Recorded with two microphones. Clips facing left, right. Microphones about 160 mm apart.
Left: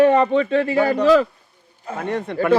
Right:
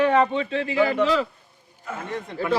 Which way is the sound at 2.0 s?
65° left (ahead or behind).